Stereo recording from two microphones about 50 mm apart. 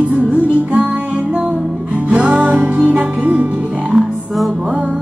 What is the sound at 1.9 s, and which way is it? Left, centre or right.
Music, right.